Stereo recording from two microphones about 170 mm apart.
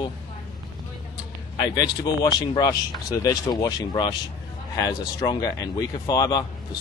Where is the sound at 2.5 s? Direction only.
20° left (ahead or behind).